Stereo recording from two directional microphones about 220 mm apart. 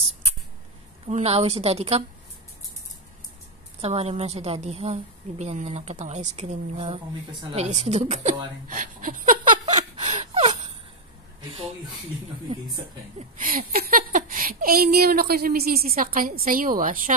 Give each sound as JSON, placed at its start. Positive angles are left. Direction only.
{"t": 1.0, "sound": "a woman's voice", "side_deg": -25}
{"t": 3.8, "sound": "a woman's voice", "side_deg": -25}
{"t": 8.6, "sound": "a sound", "side_deg": -35}
{"t": 13.6, "sound": "speech", "side_deg": -40}